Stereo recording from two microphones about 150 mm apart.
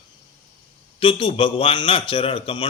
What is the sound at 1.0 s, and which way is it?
Speech, 35° left (ahead or behind).